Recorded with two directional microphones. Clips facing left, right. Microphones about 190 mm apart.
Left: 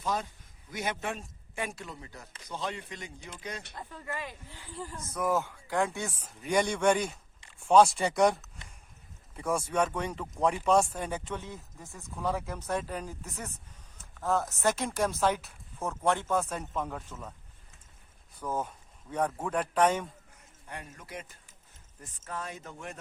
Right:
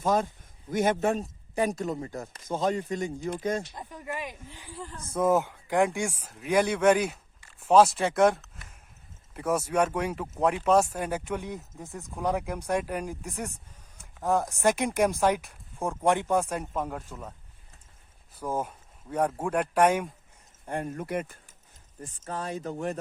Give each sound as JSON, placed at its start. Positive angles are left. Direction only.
{"t": 0.0, "sound": "speech", "side_deg": -45}
{"t": 3.8, "sound": "speech", "side_deg": -15}
{"t": 4.8, "sound": "speech", "side_deg": 10}
{"t": 5.0, "sound": "speech", "side_deg": -25}
{"t": 18.3, "sound": "speech", "side_deg": -10}
{"t": 20.7, "sound": "speech", "side_deg": -50}
{"t": 22.0, "sound": "speech", "side_deg": -30}